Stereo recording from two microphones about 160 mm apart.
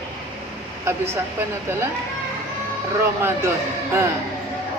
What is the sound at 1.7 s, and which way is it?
Speech, 15° right (ahead or behind).